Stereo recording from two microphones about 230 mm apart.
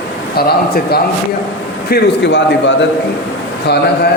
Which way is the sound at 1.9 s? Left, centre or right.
Left.